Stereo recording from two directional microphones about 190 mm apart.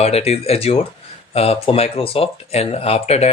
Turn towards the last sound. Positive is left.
turn(degrees=30)  # may be behind; listen again after turning